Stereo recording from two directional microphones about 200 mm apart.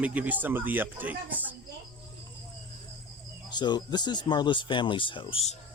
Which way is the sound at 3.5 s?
20° left (ahead or behind).